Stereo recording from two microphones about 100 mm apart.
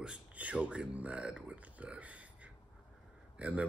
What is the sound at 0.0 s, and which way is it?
Speech, 10° right (ahead or behind).